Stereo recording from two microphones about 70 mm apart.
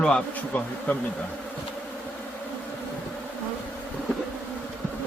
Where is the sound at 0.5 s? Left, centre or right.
Left.